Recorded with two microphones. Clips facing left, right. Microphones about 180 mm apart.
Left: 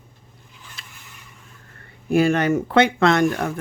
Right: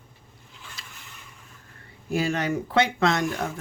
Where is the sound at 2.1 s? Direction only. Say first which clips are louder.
Left 8 dB; 55° left (ahead or behind).